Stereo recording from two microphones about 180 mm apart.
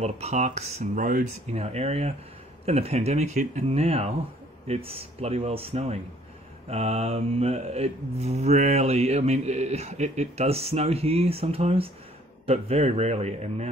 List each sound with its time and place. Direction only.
0.0 s mantra: 35° right (ahead or behind)